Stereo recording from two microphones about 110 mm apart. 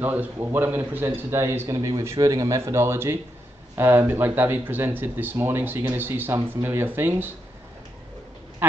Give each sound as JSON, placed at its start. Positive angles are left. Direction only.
{"t": 0.0, "sound": "speech", "side_deg": -15}